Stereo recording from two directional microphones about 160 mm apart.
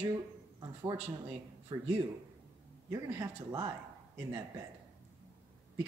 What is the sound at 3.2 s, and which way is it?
Speech, 25° right (ahead or behind).